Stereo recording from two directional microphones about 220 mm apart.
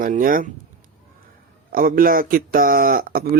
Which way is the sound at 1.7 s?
40° right (ahead or behind).